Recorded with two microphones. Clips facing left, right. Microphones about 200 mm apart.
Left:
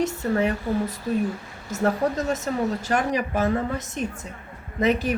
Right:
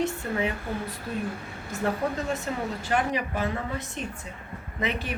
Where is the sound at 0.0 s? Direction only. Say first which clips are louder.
Left 5 dB; 45° left (ahead or behind).